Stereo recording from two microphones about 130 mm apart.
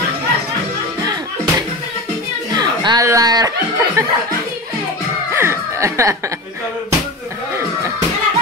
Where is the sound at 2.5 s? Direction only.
35° right (ahead or behind).